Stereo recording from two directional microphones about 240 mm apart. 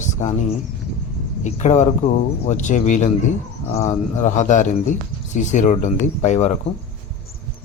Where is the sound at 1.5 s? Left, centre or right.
Left.